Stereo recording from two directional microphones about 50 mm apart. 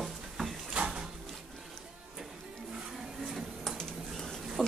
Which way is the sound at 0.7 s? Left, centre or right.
Centre.